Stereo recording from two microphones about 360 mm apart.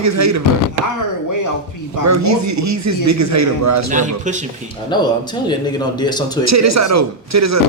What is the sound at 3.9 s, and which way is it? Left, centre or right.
Speech, centre.